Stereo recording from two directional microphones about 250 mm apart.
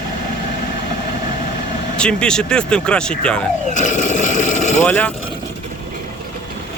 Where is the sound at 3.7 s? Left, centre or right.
Left.